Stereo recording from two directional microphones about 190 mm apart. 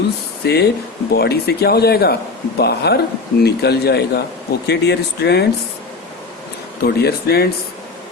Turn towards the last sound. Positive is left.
turn(degrees=55)  # may be behind; listen again after turning